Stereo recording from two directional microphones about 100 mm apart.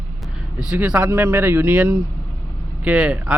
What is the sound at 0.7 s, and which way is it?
Speech, 10° right (ahead or behind).